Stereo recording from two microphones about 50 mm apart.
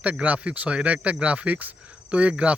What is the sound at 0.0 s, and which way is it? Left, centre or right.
A man's voice, right.